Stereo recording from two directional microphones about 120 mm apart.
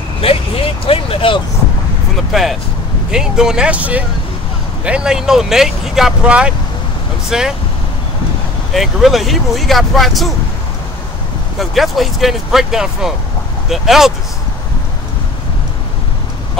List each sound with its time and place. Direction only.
0.2 s speech: 55° left (ahead or behind)
2.3 s speech: centre (ahead or behind)
8.7 s speech: centre (ahead or behind)
11.7 s speech: centre (ahead or behind)